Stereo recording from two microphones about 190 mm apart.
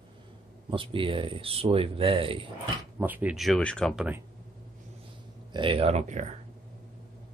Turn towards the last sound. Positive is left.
turn(degrees=-35)  # may be behind; listen again after turning